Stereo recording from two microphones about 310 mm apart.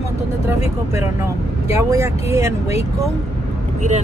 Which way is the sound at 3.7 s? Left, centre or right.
Right.